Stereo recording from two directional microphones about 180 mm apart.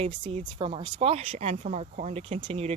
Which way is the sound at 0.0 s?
30° right (ahead or behind).